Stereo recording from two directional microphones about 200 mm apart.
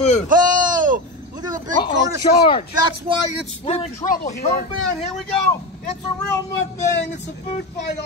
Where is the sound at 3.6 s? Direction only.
35° left (ahead or behind).